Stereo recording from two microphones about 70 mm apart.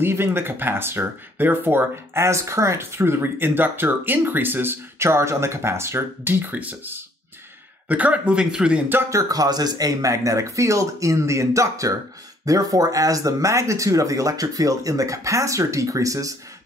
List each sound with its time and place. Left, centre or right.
0.0 s speech: right; by 8.8 s centre
9.1 s speech: right